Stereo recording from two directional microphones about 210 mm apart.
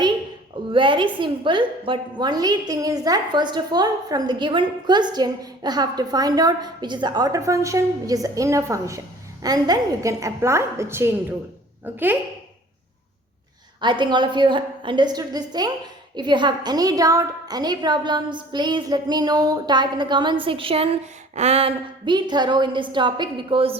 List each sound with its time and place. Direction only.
0.7 s a woman's voice: 25° right (ahead or behind)
14.0 s a woman's voice: 20° right (ahead or behind)